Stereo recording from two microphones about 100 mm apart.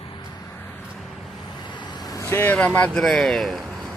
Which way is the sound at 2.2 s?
20° left (ahead or behind).